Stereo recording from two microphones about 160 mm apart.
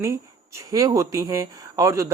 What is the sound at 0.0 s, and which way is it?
Speech, 20° right (ahead or behind).